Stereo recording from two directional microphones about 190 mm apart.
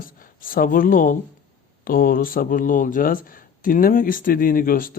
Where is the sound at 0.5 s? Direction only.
50° left (ahead or behind).